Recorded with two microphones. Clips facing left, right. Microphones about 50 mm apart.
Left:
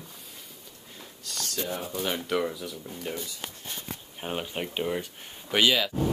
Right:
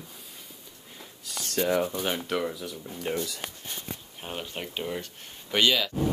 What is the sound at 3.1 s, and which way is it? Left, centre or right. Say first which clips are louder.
Speech: right 5 dB; right.